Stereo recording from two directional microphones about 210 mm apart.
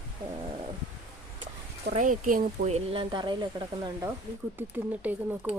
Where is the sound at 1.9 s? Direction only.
40° right (ahead or behind); by 4.0 s 20° right (ahead or behind).